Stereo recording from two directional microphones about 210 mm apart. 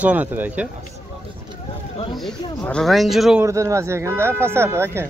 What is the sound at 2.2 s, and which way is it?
Speech, 5° left (ahead or behind).